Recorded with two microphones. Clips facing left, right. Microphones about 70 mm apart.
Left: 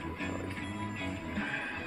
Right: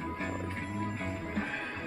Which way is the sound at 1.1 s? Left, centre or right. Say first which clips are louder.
Right 2 dB; right.